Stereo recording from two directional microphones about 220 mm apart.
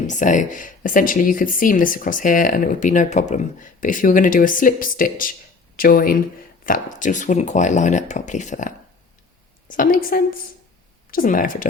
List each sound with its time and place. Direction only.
0.1 s speech: 35° left (ahead or behind)